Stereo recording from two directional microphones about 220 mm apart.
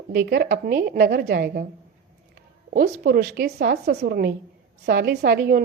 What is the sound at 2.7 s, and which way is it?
A woman's voice, 45° right (ahead or behind).